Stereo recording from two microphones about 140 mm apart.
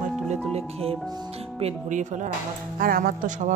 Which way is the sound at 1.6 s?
60° right (ahead or behind).